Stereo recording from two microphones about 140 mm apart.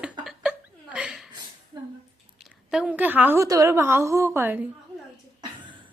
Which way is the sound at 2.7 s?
5° right (ahead or behind).